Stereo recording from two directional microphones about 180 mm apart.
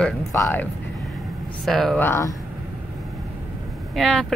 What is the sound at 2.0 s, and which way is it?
Speech, 15° left (ahead or behind).